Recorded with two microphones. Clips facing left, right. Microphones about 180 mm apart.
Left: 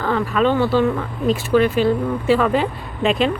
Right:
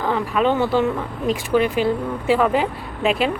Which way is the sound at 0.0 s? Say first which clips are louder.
Left 1 dB; 15° right (ahead or behind).